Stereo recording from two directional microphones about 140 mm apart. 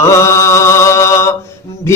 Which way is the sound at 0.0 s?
20° left (ahead or behind).